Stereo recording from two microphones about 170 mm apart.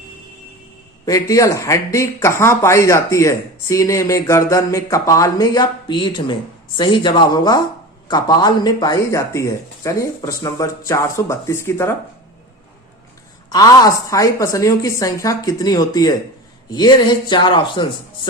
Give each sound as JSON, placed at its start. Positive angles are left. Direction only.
{"t": 1.0, "sound": "a woman's voice", "side_deg": 20}
{"t": 13.5, "sound": "a woman's voice", "side_deg": 20}